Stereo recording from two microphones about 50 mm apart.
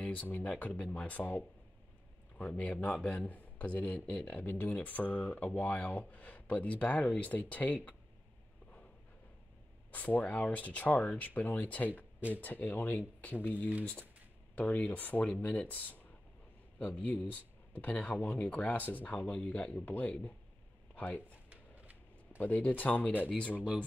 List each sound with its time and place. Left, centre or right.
0.0 s speech: left
9.8 s speech: left
19.1 s speech: centre
21.5 s a sound: right
22.4 s speech: left